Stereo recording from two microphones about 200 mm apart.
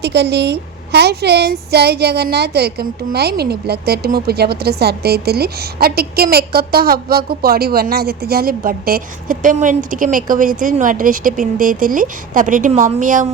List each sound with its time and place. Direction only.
0.0 s a woman's voice: 55° right (ahead or behind); by 13.2 s 40° right (ahead or behind)